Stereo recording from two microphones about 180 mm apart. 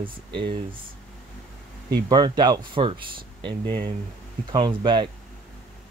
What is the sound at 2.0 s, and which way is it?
Speech, 25° right (ahead or behind).